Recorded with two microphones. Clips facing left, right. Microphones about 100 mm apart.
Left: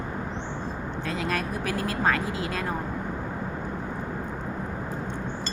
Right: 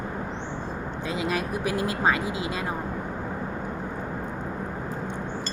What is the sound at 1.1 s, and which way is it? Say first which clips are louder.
Speech: right 2 dB; 15° right (ahead or behind).